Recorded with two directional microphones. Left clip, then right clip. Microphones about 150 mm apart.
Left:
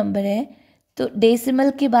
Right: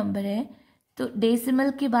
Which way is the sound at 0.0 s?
30° left (ahead or behind).